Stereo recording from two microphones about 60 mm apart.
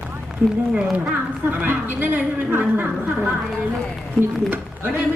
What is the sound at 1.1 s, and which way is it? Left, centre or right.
A woman's voice, right.